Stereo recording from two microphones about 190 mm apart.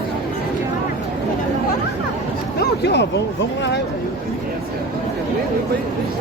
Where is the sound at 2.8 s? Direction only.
65° left (ahead or behind).